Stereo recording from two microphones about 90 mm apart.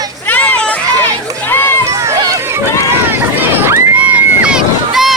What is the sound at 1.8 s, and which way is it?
Run, 35° right (ahead or behind).